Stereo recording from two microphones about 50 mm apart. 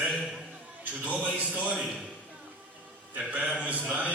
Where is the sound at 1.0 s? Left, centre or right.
Right.